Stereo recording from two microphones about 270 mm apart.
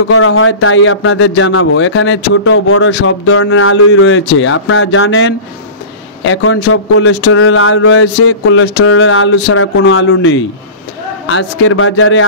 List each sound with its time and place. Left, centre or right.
0.1 s speech: left